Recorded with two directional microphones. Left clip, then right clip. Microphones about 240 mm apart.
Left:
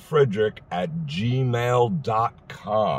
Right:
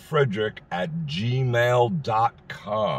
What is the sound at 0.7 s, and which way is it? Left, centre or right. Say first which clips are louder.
Speech: left 1 dB; centre.